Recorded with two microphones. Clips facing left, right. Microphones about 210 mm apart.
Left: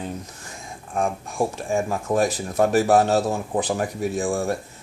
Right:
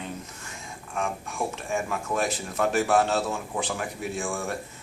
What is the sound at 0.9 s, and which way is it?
Speech, 35° left (ahead or behind).